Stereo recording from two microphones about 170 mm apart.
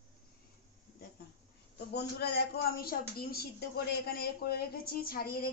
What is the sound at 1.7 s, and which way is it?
A woman's voice, 75° left (ahead or behind).